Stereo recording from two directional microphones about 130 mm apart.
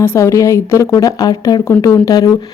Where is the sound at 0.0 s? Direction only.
20° left (ahead or behind).